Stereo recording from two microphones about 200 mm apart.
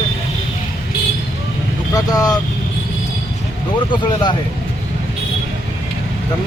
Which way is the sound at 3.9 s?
20° left (ahead or behind).